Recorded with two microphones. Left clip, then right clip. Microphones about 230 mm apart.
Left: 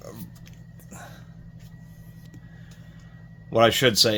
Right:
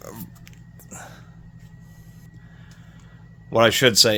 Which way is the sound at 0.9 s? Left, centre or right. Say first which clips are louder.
Right 3 dB; right.